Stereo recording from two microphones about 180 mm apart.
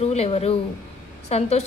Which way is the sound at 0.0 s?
35° left (ahead or behind).